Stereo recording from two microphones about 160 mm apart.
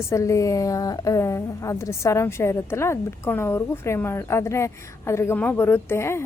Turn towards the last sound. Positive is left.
turn(degrees=15)  # may be behind; listen again after turning